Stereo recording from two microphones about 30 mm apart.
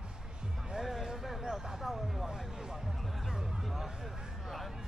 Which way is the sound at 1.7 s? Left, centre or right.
Centre.